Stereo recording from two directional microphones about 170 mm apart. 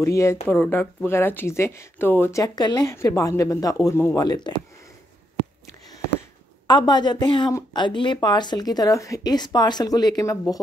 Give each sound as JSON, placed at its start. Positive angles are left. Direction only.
{"t": 0.0, "sound": "speech", "side_deg": 15}
{"t": 6.7, "sound": "a woman's voice", "side_deg": 25}